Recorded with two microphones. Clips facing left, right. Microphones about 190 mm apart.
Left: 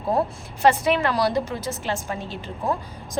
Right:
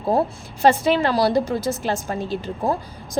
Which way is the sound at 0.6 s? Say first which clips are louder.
Right 2 dB; 30° right (ahead or behind).